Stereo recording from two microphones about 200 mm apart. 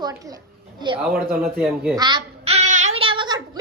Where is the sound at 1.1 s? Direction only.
Centre (ahead or behind).